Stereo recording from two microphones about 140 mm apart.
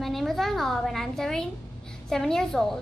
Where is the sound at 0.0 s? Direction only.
Centre (ahead or behind).